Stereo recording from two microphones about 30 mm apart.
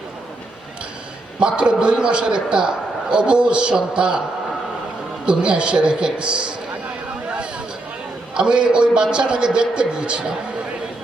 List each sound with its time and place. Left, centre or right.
1.4 s a man's voice: right
5.2 s a man's voice: right
6.1 s a man's voice: right
8.4 s a man's voice: right